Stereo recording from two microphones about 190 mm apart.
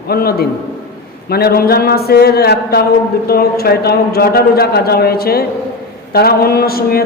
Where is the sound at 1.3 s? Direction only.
55° left (ahead or behind).